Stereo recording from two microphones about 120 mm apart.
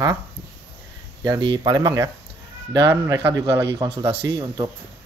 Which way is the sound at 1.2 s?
35° right (ahead or behind).